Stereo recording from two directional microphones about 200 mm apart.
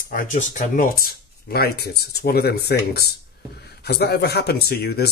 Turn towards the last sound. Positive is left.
turn(degrees=50)  # may be behind; listen again after turning